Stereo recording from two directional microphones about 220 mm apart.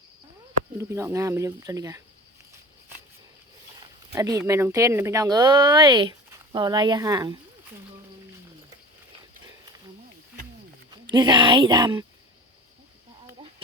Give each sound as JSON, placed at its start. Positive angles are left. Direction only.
{"t": 0.8, "sound": "speech", "side_deg": -10}
{"t": 4.1, "sound": "speech", "side_deg": -15}
{"t": 10.9, "sound": "a woman's voice", "side_deg": -20}